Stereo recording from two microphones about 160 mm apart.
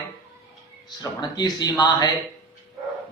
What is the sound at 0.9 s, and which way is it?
Speech, 25° left (ahead or behind).